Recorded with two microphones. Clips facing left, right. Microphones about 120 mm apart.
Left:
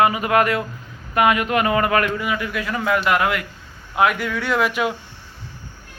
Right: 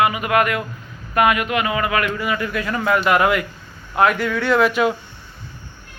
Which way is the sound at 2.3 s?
5° left (ahead or behind).